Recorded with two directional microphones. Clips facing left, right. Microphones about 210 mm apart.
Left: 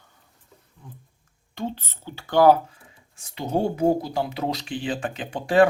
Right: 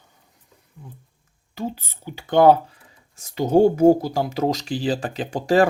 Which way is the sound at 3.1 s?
40° right (ahead or behind).